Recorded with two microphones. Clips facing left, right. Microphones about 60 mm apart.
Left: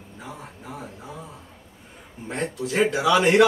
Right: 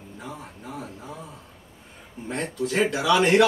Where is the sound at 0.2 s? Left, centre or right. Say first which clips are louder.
Even; centre.